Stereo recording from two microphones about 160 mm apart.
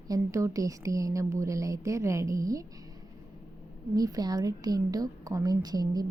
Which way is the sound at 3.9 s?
25° right (ahead or behind).